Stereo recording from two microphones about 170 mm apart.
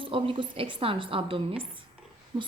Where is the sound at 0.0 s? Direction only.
30° right (ahead or behind).